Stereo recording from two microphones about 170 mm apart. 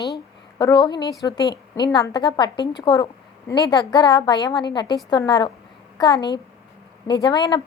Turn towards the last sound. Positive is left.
turn(degrees=25)  # may be behind; listen again after turning